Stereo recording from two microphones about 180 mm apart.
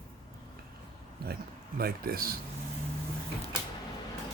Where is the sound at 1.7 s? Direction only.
55° right (ahead or behind).